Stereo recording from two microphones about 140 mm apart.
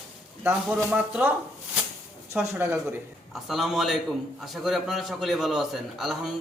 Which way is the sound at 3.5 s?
Centre (ahead or behind).